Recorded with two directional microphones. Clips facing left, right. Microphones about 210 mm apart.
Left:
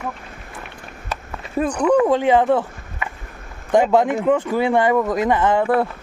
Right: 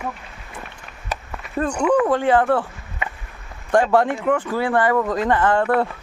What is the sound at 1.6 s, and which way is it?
Speech, 10° left (ahead or behind).